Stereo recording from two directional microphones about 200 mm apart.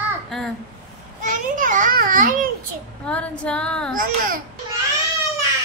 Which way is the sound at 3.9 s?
45° right (ahead or behind).